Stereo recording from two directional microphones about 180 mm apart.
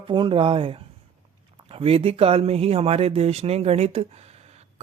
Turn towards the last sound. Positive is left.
turn(degrees=-35)  # may be behind; listen again after turning